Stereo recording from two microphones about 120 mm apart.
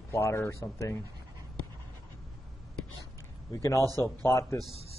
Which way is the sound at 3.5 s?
25° left (ahead or behind).